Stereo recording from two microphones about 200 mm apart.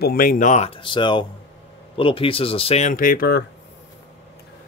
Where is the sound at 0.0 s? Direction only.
50° left (ahead or behind).